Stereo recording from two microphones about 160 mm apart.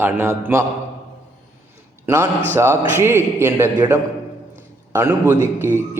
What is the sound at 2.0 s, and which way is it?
A man's voice, 15° right (ahead or behind).